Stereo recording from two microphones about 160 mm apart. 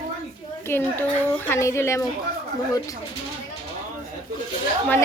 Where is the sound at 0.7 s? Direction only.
15° left (ahead or behind).